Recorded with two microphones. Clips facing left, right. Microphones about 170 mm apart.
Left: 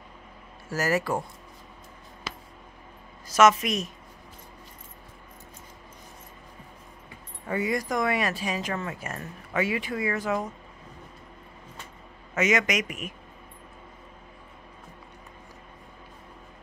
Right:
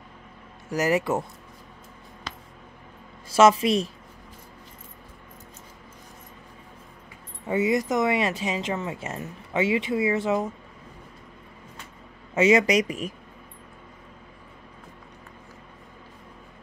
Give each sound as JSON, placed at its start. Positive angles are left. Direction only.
{"t": 0.7, "sound": "speech", "side_deg": -20}
{"t": 2.3, "sound": "a sound", "side_deg": 10}
{"t": 3.3, "sound": "speech", "side_deg": -30}
{"t": 7.4, "sound": "speech", "side_deg": -20}
{"t": 12.4, "sound": "speech", "side_deg": -30}